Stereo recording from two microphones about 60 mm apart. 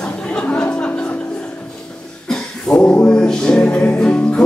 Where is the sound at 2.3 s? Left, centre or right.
Centre.